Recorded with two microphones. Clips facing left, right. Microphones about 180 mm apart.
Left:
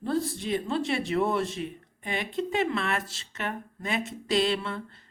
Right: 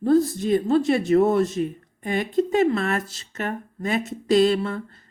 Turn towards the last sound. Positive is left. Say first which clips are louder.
# right 8 dB
turn(degrees=-45)  # may be behind; listen again after turning